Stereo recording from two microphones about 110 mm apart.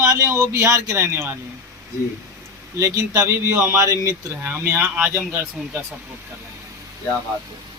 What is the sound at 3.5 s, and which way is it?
Speech, 20° right (ahead or behind).